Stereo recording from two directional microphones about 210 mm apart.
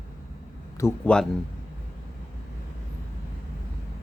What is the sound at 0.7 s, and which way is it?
Speech, 10° left (ahead or behind).